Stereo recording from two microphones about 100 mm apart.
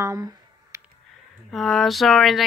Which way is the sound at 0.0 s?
30° right (ahead or behind).